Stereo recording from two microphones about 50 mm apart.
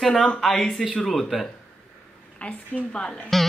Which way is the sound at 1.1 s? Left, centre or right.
Centre.